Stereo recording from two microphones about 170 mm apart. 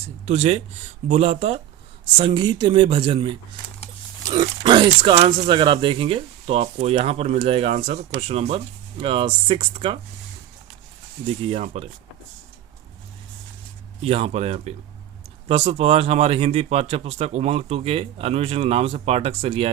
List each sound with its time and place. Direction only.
0.3 s speech: 40° right (ahead or behind)
4.3 s speech: 25° right (ahead or behind)
11.4 s speech: 35° right (ahead or behind)
14.0 s speech: 35° right (ahead or behind)